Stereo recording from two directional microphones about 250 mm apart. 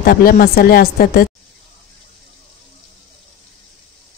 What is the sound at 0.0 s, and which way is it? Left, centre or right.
Speech, left.